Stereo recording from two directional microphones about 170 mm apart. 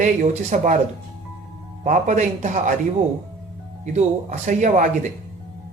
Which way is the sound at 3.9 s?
45° right (ahead or behind).